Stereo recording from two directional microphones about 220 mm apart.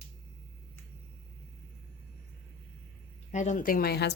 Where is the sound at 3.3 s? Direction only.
35° left (ahead or behind).